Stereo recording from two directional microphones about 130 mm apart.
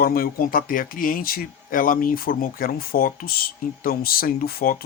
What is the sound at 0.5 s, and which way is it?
Speech, 90° left.